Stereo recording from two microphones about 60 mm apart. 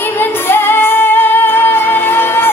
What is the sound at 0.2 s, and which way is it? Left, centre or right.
Music, left.